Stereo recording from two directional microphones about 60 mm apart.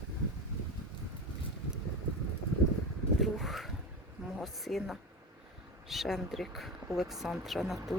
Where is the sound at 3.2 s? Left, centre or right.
Centre.